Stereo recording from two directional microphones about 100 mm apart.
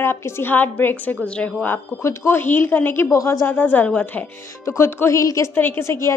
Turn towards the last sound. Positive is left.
turn(degrees=30)  # may be behind; listen again after turning